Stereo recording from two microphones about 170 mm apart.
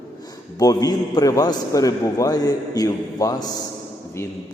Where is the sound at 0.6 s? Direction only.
20° left (ahead or behind).